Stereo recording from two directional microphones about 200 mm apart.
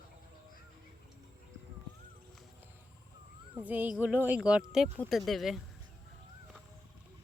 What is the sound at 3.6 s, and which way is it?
Speech, 10° right (ahead or behind).